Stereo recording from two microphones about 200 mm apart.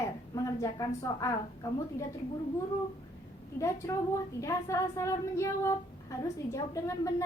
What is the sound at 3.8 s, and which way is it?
Speech, 15° left (ahead or behind).